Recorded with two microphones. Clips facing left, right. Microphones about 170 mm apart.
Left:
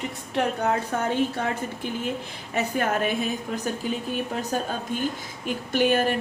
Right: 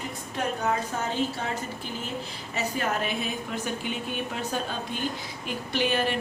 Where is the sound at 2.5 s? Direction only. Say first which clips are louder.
Left 4 dB; 55° left (ahead or behind).